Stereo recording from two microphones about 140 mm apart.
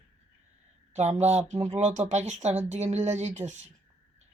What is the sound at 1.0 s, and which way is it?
Speech, 55° right (ahead or behind).